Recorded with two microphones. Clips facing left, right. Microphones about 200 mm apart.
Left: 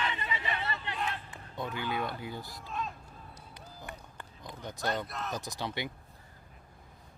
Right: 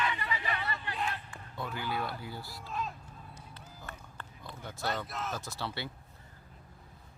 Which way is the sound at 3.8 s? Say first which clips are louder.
Left 2 dB; 15° left (ahead or behind).